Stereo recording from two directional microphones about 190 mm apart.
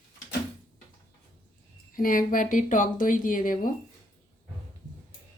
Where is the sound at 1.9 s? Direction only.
45° left (ahead or behind).